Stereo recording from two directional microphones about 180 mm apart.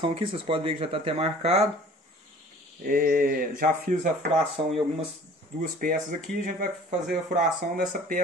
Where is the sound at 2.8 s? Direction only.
50° right (ahead or behind).